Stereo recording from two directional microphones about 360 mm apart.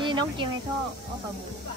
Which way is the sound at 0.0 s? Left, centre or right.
Centre.